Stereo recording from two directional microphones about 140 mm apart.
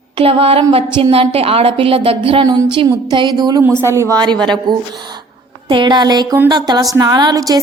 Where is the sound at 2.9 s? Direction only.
30° right (ahead or behind).